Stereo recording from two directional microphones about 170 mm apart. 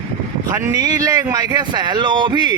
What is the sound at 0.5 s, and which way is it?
Speech, 20° right (ahead or behind).